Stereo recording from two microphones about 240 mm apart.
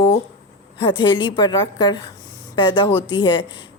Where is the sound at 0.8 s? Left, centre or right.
Centre.